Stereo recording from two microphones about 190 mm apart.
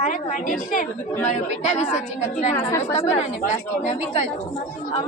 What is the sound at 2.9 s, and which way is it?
Speech, 35° left (ahead or behind).